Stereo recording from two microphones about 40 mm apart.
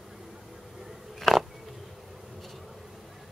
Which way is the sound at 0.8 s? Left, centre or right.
Centre.